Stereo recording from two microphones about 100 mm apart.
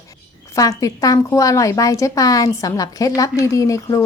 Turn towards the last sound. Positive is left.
turn(degrees=35)  # may be behind; listen again after turning